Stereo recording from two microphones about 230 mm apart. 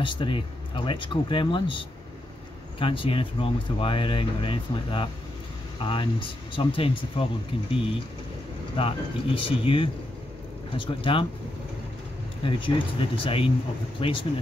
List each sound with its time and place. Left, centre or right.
0.0 s speech: left
8.7 s speech: left
12.4 s speech: left